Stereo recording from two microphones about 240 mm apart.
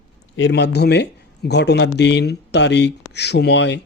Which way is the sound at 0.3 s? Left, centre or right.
Left.